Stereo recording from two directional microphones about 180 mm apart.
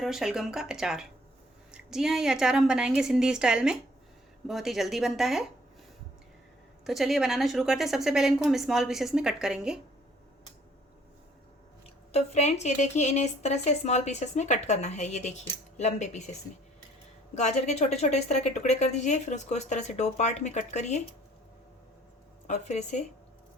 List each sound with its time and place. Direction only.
0.0 s a woman's voice: centre (ahead or behind)
6.8 s a woman's voice: centre (ahead or behind)
12.1 s a woman's voice: 35° left (ahead or behind)
17.3 s a woman's voice: 40° left (ahead or behind)
22.4 s a woman's voice: 40° left (ahead or behind)